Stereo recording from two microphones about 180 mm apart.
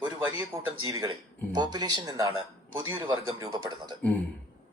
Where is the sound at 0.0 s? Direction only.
10° right (ahead or behind).